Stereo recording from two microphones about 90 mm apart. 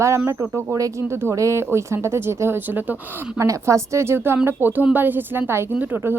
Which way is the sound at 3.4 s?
35° right (ahead or behind).